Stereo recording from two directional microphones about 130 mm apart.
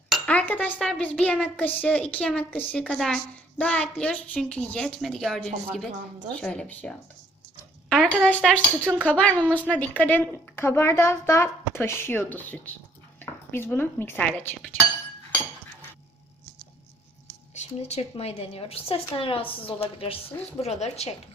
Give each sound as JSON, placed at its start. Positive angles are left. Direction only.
{"t": 0.3, "sound": "a woman's voice", "side_deg": 10}
{"t": 17.5, "sound": "speech", "side_deg": 60}
{"t": 20.6, "sound": "speech", "side_deg": 60}